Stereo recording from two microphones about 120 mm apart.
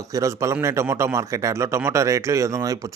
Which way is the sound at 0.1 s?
25° right (ahead or behind).